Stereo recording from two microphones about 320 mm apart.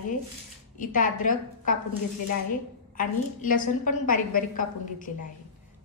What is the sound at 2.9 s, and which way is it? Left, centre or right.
A woman's voice, left.